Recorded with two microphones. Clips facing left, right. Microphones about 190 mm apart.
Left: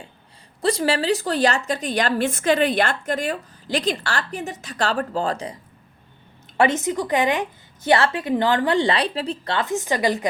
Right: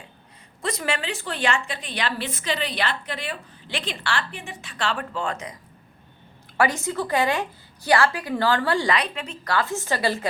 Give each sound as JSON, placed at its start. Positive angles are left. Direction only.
{"t": 0.6, "sound": "a woman's voice", "side_deg": 30}
{"t": 6.6, "sound": "a woman's voice", "side_deg": 20}